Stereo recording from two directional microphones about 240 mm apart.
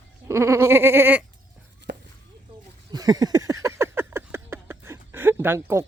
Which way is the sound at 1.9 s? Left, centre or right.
Right.